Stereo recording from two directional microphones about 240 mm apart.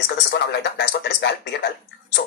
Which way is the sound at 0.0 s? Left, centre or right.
Left.